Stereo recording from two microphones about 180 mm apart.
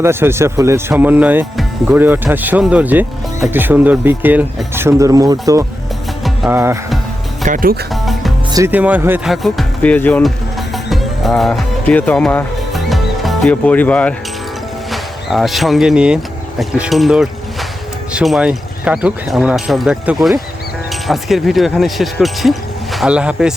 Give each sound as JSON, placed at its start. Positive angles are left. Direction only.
{"t": 0.0, "sound": "speech", "side_deg": -15}
{"t": 7.4, "sound": "speech", "side_deg": -50}
{"t": 8.5, "sound": "speech", "side_deg": -10}
{"t": 10.8, "sound": "music", "side_deg": 0}
{"t": 14.8, "sound": "speech", "side_deg": 0}